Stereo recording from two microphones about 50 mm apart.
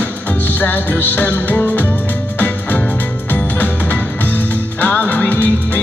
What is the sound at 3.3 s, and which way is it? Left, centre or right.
Music, left.